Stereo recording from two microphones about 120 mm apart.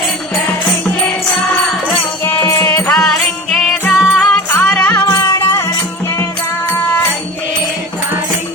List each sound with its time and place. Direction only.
2.2 s music: 15° left (ahead or behind)
3.5 s music: centre (ahead or behind)
4.2 s music: 10° left (ahead or behind)